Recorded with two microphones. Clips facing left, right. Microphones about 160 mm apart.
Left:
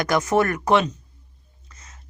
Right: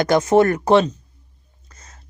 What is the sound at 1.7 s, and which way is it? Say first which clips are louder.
Whispering: right 2 dB; 35° right (ahead or behind).